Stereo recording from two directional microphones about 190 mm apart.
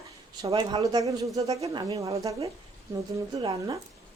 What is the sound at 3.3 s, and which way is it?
Speech, 25° right (ahead or behind).